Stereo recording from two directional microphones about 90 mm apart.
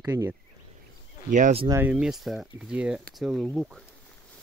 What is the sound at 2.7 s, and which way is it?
Speech, 15° right (ahead or behind).